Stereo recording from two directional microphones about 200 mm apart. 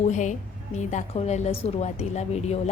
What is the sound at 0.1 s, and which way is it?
A woman's voice, 35° left (ahead or behind).